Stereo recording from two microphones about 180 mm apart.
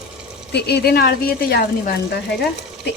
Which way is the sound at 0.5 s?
65° left (ahead or behind).